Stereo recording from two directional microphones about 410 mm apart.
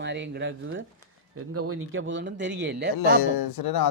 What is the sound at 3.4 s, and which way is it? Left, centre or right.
Speech, left.